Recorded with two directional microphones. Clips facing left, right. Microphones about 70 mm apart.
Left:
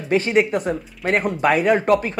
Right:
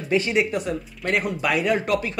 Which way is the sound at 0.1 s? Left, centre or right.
Left.